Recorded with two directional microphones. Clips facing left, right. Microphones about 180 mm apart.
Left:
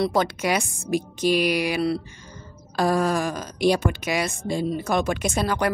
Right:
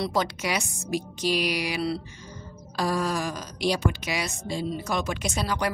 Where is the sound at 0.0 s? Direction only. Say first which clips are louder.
Left 5 dB; 55° left (ahead or behind).